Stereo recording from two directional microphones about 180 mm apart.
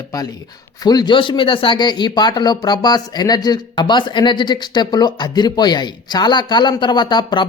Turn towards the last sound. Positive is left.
turn(degrees=25)  # may be behind; listen again after turning